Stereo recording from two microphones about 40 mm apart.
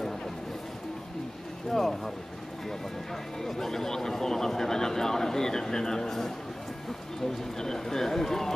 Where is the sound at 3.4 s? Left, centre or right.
Centre.